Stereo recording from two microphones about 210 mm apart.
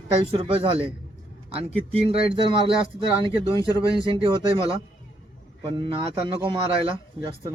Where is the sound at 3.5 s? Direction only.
15° left (ahead or behind).